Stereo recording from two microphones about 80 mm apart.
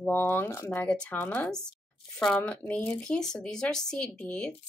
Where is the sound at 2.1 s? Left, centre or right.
Centre.